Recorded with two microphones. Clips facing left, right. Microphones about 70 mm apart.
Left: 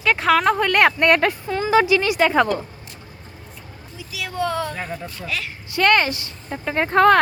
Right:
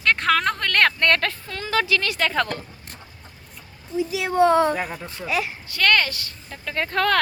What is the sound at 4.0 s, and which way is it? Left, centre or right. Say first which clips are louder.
Speech: right 7 dB; right.